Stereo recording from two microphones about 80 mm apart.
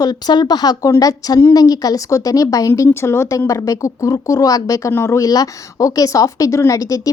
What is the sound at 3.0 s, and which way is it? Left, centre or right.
Speech, left.